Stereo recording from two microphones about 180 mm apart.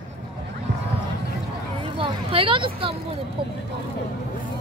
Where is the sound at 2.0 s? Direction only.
30° right (ahead or behind).